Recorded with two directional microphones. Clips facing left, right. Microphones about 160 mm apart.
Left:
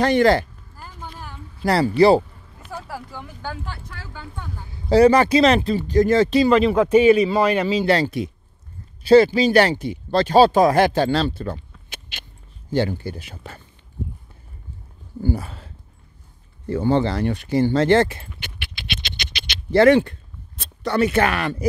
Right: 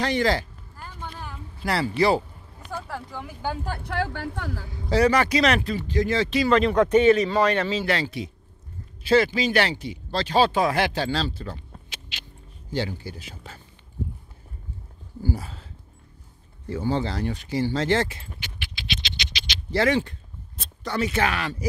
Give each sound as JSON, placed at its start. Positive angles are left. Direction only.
{"t": 0.0, "sound": "speech", "side_deg": 55}
{"t": 0.7, "sound": "a sound", "side_deg": 5}
{"t": 1.6, "sound": "speech", "side_deg": 35}
{"t": 2.7, "sound": "speech", "side_deg": 5}
{"t": 3.8, "sound": "speech", "side_deg": -75}
{"t": 4.8, "sound": "speech", "side_deg": 30}
{"t": 5.9, "sound": "speech", "side_deg": 45}
{"t": 6.5, "sound": "a man's voice", "side_deg": 5}
{"t": 7.8, "sound": "speech", "side_deg": 40}
{"t": 9.0, "sound": "speech", "side_deg": 35}
{"t": 11.9, "sound": "a sound", "side_deg": 55}
{"t": 12.7, "sound": "speech", "side_deg": 55}
{"t": 15.2, "sound": "speech", "side_deg": 60}
{"t": 18.4, "sound": "scratch", "side_deg": 60}